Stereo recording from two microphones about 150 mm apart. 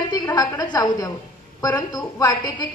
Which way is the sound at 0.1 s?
25° left (ahead or behind).